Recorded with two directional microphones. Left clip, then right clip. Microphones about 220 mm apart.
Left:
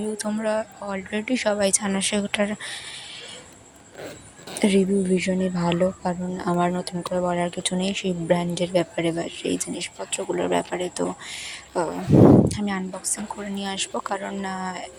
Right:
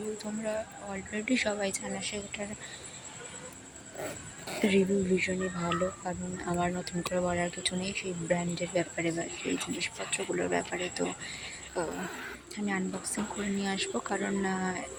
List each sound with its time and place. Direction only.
0.2 s speech: 25° left (ahead or behind)
4.6 s speech: 20° left (ahead or behind)